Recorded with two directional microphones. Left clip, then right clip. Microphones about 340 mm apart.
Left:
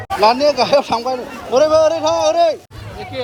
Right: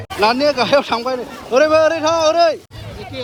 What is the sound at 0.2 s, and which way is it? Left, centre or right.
Speech, centre.